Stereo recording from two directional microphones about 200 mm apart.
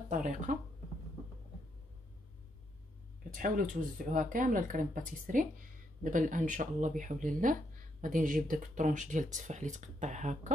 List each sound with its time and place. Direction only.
0.1 s speech: 40° right (ahead or behind)
3.3 s speech: 45° right (ahead or behind)